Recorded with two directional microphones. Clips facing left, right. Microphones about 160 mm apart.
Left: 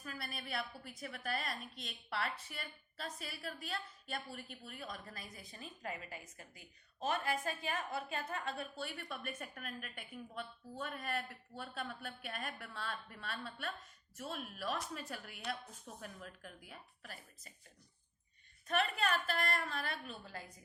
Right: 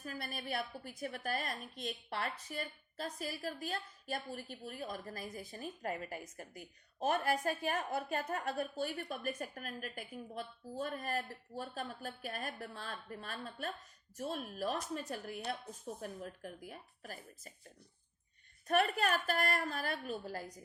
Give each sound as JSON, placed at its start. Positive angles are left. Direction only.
{"t": 0.0, "sound": "a woman's voice", "side_deg": -45}
{"t": 18.7, "sound": "a woman's voice", "side_deg": -45}